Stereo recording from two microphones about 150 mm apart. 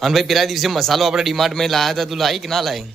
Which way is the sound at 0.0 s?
Centre (ahead or behind).